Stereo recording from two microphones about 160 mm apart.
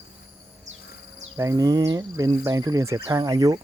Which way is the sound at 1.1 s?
20° right (ahead or behind).